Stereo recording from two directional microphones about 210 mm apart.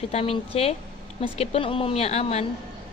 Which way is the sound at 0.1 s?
30° left (ahead or behind).